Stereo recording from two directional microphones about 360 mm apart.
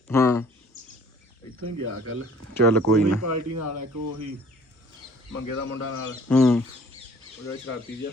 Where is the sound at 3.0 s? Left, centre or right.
Right.